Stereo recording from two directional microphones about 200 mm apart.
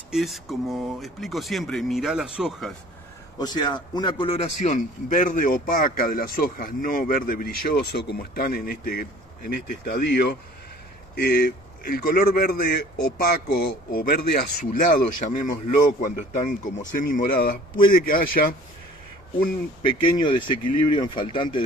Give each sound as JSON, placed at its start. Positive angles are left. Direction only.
{"t": 0.1, "sound": "speech", "side_deg": 0}
{"t": 3.3, "sound": "a man's voice", "side_deg": 20}
{"t": 19.9, "sound": "speech", "side_deg": 25}